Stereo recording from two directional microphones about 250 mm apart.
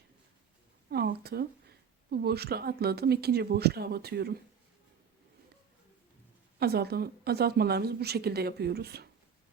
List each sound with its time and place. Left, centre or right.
0.9 s speech: right
6.6 s a woman's voice: right